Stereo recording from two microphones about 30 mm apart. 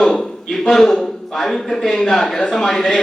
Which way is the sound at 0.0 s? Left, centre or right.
Centre.